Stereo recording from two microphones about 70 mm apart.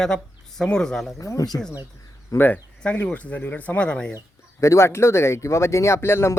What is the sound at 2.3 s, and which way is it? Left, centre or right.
Speech, left.